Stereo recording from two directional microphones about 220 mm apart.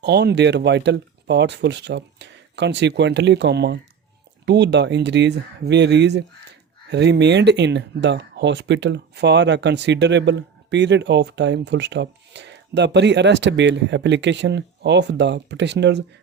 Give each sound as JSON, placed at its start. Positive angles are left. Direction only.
{"t": 0.0, "sound": "speech", "side_deg": -50}